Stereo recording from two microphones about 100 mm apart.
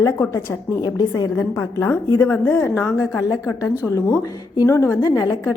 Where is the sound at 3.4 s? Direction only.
35° left (ahead or behind).